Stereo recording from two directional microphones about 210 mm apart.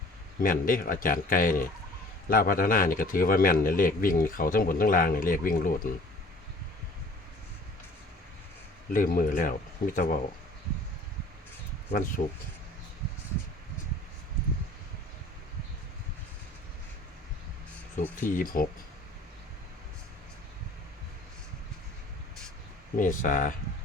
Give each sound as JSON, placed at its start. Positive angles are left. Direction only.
{"t": 0.4, "sound": "a man's voice", "side_deg": 40}
{"t": 8.9, "sound": "a man's voice", "side_deg": 40}
{"t": 11.9, "sound": "a man's voice", "side_deg": 40}
{"t": 17.9, "sound": "a man's voice", "side_deg": 40}
{"t": 23.0, "sound": "a man's voice", "side_deg": 40}